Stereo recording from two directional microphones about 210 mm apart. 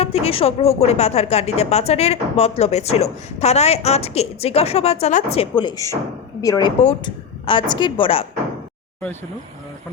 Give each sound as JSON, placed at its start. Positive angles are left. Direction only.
{"t": 0.0, "sound": "a woman's voice", "side_deg": 30}